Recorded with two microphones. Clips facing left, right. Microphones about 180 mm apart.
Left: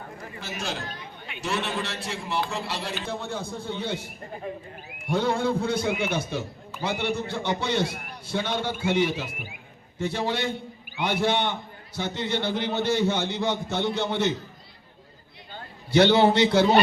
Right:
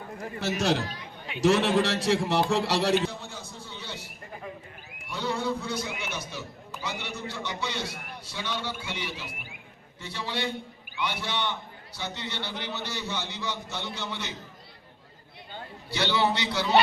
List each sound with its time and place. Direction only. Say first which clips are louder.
0.8 s speech: right 2 dB; 50° left (ahead or behind)
1.4 s a man's voice: right 7 dB; 90° right
3.1 s a man's voice: left 9 dB; 60° left (ahead or behind)
15.9 s a man's voice: left 9 dB; 50° left (ahead or behind)